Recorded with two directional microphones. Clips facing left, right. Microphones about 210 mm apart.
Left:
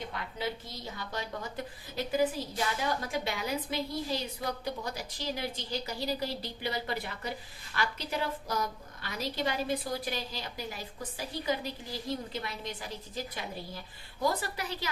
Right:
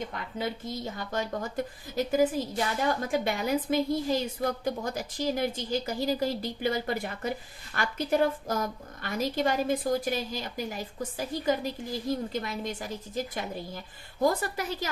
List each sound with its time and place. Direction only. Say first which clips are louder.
0.1 s a woman's voice: right 3 dB; 50° right (ahead or behind)